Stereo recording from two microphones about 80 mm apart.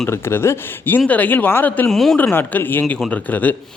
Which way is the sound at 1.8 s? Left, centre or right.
Centre.